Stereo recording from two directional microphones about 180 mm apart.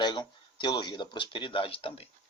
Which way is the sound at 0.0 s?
25° left (ahead or behind).